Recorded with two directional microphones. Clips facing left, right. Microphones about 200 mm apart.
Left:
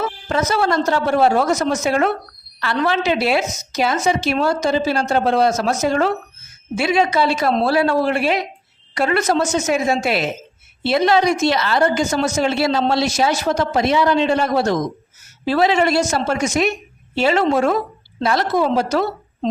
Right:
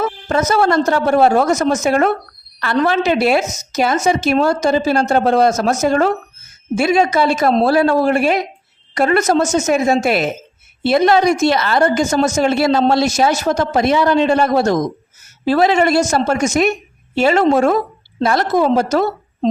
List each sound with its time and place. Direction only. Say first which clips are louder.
0.0 s a woman's voice: right 3 dB; 45° right (ahead or behind)